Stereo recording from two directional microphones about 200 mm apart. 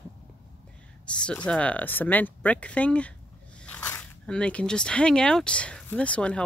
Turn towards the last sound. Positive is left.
turn(degrees=5)  # may be behind; listen again after turning